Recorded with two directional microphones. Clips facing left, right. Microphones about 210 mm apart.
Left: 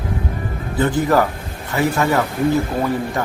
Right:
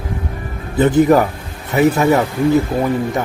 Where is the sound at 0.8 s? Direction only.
20° right (ahead or behind).